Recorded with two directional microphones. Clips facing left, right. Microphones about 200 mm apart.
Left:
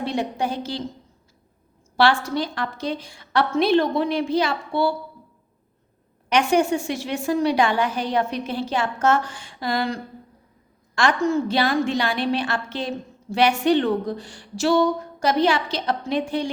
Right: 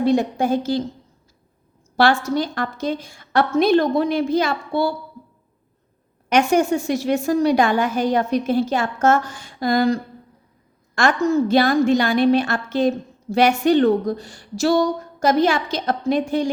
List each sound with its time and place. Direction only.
0.0 s a woman's voice: 45° right (ahead or behind)
2.0 s a woman's voice: 45° right (ahead or behind)
6.2 s a woman's voice: 45° right (ahead or behind)